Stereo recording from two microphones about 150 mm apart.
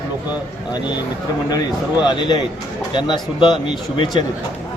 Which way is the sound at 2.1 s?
30° left (ahead or behind).